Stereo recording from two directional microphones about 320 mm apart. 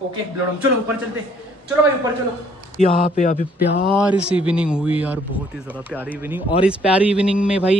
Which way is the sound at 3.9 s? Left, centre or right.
Centre.